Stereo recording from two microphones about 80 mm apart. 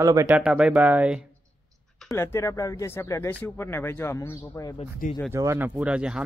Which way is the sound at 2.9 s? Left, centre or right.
Left.